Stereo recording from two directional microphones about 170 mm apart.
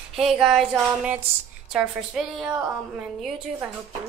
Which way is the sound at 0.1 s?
5° right (ahead or behind).